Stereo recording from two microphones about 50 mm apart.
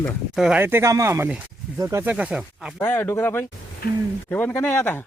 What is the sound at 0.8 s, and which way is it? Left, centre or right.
Speech, right.